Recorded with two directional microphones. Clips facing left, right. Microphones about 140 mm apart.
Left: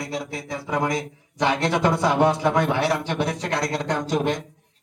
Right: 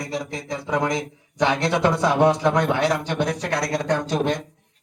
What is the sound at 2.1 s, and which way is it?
Speech, 15° right (ahead or behind).